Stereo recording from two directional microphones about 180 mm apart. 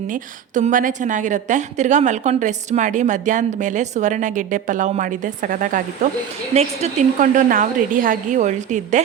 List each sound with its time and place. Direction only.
0.1 s a woman's voice: 45° right (ahead or behind)
6.5 s a woman's voice: 35° right (ahead or behind)